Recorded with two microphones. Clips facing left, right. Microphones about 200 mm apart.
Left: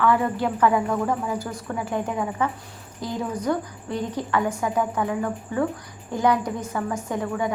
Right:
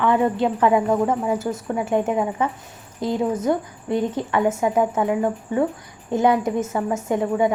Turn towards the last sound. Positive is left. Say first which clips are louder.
# right 6 dB
turn(degrees=-25)  # may be behind; listen again after turning